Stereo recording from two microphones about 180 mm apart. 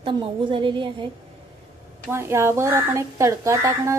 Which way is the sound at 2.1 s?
15° right (ahead or behind).